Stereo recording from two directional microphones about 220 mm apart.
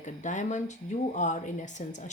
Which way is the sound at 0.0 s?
35° left (ahead or behind).